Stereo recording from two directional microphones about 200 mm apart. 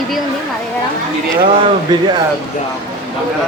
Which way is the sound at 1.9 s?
20° right (ahead or behind).